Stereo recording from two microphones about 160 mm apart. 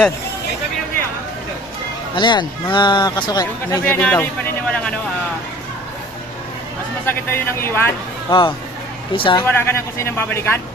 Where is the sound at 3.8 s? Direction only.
10° left (ahead or behind).